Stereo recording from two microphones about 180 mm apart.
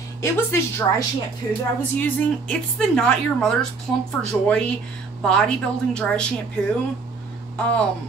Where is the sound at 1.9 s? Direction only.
5° left (ahead or behind).